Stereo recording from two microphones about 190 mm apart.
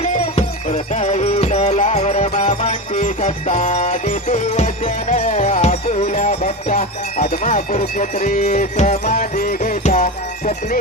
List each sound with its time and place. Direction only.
0.0 s music: 35° left (ahead or behind)